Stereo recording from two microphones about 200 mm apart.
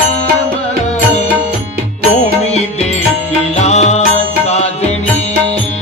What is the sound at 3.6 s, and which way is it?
Music, 35° left (ahead or behind).